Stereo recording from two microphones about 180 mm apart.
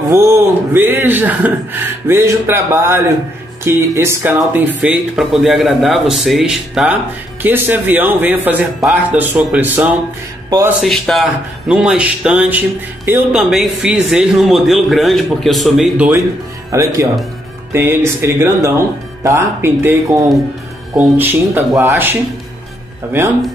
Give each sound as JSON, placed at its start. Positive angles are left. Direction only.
{"t": 0.1, "sound": "a man's voice", "side_deg": -15}
{"t": 16.7, "sound": "a man's voice", "side_deg": -15}